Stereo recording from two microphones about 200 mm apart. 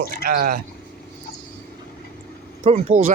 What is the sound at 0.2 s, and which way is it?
Speech, 45° right (ahead or behind).